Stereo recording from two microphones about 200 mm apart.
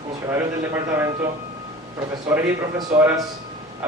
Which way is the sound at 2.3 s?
10° right (ahead or behind).